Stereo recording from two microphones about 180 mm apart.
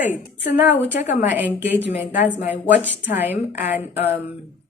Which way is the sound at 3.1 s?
10° right (ahead or behind).